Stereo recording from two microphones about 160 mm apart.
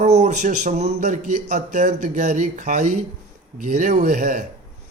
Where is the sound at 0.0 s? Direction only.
45° right (ahead or behind).